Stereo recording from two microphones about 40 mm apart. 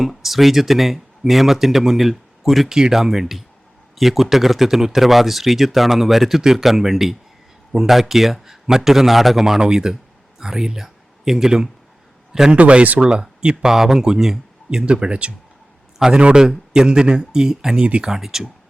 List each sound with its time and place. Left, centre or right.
0.0 s speech: centre
2.6 s a man's voice: centre
12.5 s speech: right
13.0 s speech: right
13.7 s a man's voice: centre